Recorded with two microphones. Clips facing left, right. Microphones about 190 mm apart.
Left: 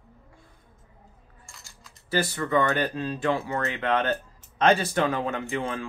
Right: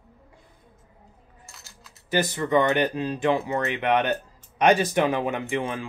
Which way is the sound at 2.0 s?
20° right (ahead or behind).